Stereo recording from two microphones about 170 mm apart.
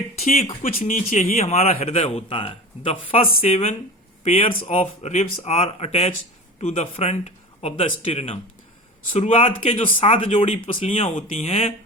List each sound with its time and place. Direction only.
0.2 s speech: 40° left (ahead or behind)